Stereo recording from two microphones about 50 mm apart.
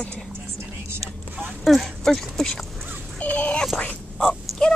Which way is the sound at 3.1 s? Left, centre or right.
Left.